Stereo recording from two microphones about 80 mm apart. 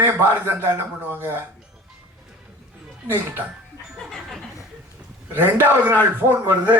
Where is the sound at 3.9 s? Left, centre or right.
Centre.